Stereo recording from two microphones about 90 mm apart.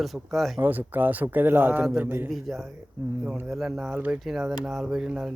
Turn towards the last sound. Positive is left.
turn(degrees=-5)  # may be behind; listen again after turning